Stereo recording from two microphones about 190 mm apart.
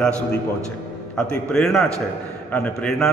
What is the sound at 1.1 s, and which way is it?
A man's voice, 5° left (ahead or behind).